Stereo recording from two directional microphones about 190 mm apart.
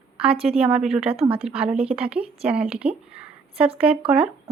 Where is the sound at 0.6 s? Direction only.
5° right (ahead or behind).